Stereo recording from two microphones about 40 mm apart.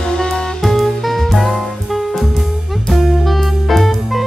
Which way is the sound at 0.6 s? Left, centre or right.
Centre.